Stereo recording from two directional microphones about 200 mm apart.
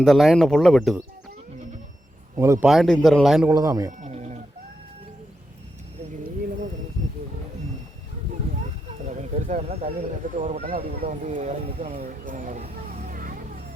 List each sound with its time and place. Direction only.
0.0 s speech: centre (ahead or behind)
2.3 s speech: 15° right (ahead or behind)
2.6 s speech: centre (ahead or behind)
3.5 s speech: 20° right (ahead or behind)
4.0 s chicken: 35° right (ahead or behind)
9.0 s a sound: 35° right (ahead or behind)
10.3 s speech: 35° right (ahead or behind)
12.0 s a sound: 40° right (ahead or behind)